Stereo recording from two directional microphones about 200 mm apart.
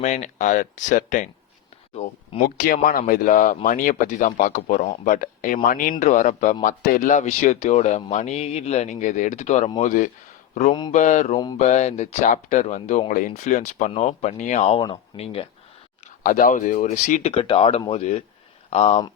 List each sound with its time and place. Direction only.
0.0 s speech: 35° left (ahead or behind)
2.4 s speech: 45° left (ahead or behind)
10.8 s speech: 20° left (ahead or behind)
11.0 s speech: 35° left (ahead or behind)
16.2 s speech: 45° left (ahead or behind)